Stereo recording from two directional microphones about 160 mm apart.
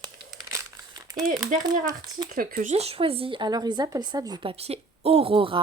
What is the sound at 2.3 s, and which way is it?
Speech, 65° right (ahead or behind).